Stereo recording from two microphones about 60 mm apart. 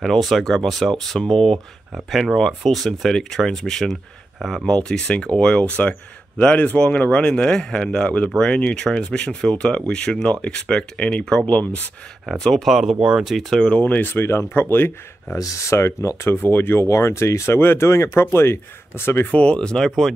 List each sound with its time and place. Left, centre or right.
0.0 s speech: centre
4.4 s speech: centre
4.6 s speech: centre
12.4 s speech: centre
12.6 s speech: centre
13.5 s speech: centre
13.7 s speech: left
15.3 s speech: left
16.3 s speech: left
16.8 s speech: left
19.3 s speech: centre